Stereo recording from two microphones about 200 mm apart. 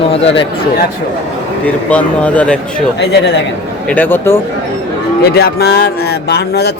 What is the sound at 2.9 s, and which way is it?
Speech, 55° left (ahead or behind).